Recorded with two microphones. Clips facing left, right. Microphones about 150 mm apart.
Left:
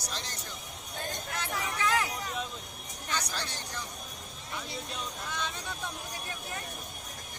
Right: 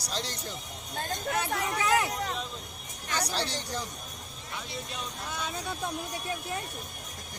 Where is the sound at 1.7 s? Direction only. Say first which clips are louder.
Right 3 dB; 15° right (ahead or behind).